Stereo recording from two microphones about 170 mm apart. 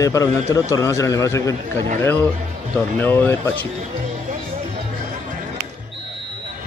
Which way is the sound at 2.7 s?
10° left (ahead or behind).